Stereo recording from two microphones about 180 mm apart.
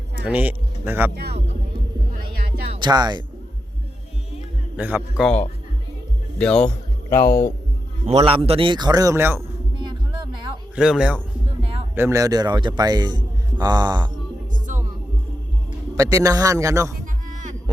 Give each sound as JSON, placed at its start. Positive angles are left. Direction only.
{"t": 0.3, "sound": "speech", "side_deg": -10}
{"t": 1.1, "sound": "speech", "side_deg": -65}
{"t": 2.7, "sound": "a man's voice", "side_deg": -25}
{"t": 4.8, "sound": "a man's voice", "side_deg": -10}
{"t": 5.2, "sound": "speech", "side_deg": 5}
{"t": 7.1, "sound": "speech", "side_deg": 55}
{"t": 8.0, "sound": "a man's voice", "side_deg": -30}
{"t": 10.8, "sound": "a man's voice", "side_deg": -5}
{"t": 16.0, "sound": "a man's voice", "side_deg": -20}
{"t": 17.2, "sound": "a sound", "side_deg": -45}